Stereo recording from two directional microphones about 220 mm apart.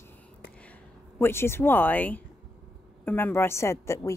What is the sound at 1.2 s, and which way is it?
A woman's voice, 10° left (ahead or behind).